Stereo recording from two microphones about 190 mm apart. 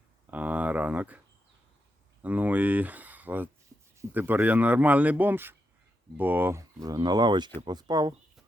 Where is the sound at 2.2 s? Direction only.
10° right (ahead or behind).